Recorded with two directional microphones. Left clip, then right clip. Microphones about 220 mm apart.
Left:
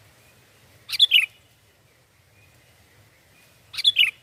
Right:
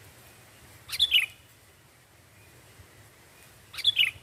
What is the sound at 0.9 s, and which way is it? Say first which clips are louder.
Bird: left 6 dB; centre (ahead or behind).